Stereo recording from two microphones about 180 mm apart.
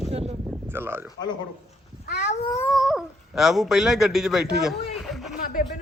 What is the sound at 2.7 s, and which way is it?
Speech, centre (ahead or behind).